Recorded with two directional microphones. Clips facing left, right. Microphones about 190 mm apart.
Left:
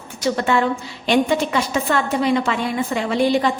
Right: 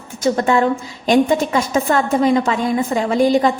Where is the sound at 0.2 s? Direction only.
40° right (ahead or behind).